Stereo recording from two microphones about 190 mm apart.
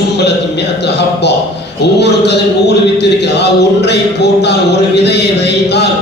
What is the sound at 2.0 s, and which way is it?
Speech, 65° left (ahead or behind).